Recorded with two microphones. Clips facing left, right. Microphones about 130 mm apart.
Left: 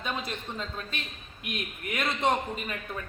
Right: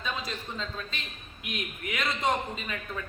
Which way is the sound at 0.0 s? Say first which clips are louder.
Left 1 dB; 55° left (ahead or behind).